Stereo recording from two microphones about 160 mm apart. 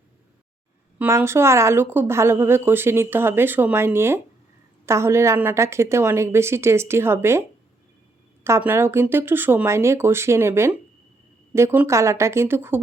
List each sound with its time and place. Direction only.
0.9 s a woman's voice: 15° right (ahead or behind)
8.4 s a woman's voice: 15° right (ahead or behind)